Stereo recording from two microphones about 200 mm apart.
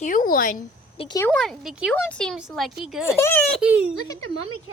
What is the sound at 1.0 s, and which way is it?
Speech, 20° left (ahead or behind).